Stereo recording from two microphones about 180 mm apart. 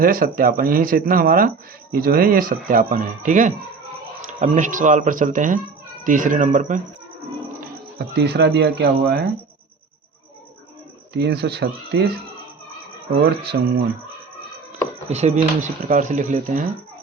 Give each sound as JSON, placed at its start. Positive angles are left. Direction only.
{"t": 0.0, "sound": "speech", "side_deg": -55}
{"t": 7.6, "sound": "speech", "side_deg": -60}
{"t": 11.1, "sound": "speech", "side_deg": -65}
{"t": 13.4, "sound": "speech", "side_deg": -65}
{"t": 15.1, "sound": "speech", "side_deg": -35}